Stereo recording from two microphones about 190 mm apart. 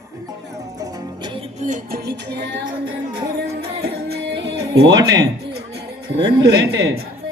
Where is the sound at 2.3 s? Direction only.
65° right (ahead or behind).